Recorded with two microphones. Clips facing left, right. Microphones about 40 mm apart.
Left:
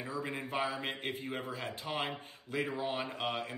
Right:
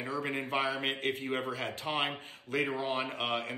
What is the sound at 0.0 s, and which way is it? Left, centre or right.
Speech, right.